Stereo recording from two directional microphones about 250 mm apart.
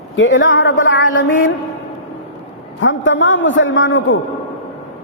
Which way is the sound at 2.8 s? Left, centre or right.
Left.